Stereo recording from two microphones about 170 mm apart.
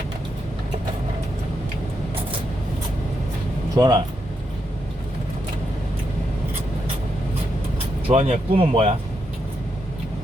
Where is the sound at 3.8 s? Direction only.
25° right (ahead or behind).